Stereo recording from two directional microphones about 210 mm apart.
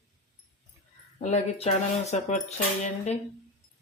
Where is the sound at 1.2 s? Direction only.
30° left (ahead or behind).